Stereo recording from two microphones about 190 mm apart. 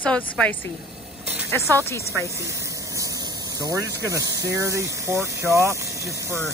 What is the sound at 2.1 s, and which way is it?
Speech, 15° right (ahead or behind).